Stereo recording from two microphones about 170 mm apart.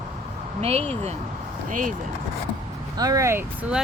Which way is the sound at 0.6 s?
40° right (ahead or behind).